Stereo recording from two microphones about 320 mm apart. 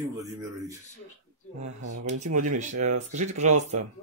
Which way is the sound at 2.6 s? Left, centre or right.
Right.